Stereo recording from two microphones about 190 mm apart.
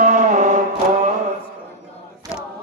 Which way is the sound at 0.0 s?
40° right (ahead or behind).